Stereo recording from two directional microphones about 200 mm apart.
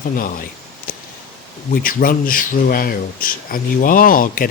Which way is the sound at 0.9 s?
45° left (ahead or behind).